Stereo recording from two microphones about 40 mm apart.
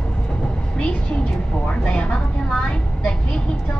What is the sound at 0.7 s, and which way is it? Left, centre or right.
A woman's voice, left.